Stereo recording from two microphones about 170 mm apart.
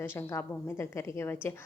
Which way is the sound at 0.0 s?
15° left (ahead or behind).